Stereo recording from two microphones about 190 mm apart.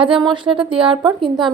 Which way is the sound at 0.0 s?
25° right (ahead or behind).